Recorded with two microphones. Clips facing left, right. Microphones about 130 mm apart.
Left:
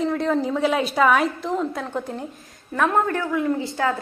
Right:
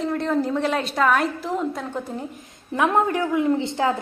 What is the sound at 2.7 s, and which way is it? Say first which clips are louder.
A woman's voice: right 1 dB; 15° right (ahead or behind).